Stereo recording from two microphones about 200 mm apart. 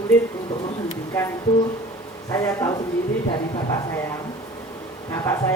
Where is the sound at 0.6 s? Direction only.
20° left (ahead or behind).